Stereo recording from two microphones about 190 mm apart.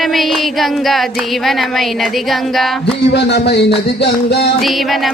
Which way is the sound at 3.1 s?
60° left (ahead or behind).